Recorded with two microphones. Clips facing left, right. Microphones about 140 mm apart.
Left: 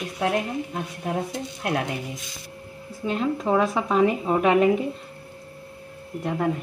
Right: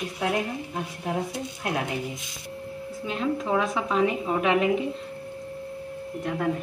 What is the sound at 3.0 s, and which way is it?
A woman's voice, 40° left (ahead or behind).